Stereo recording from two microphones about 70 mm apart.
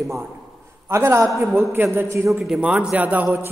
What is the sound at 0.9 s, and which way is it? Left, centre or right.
Speech, right.